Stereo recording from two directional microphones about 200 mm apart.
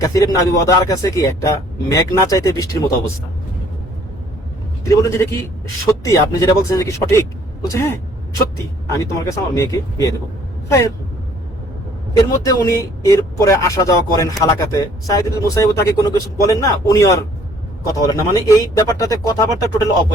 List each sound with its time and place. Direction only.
0.0 s a man's voice: 15° left (ahead or behind)
4.9 s a man's voice: 15° left (ahead or behind)
12.1 s a man's voice: 15° left (ahead or behind)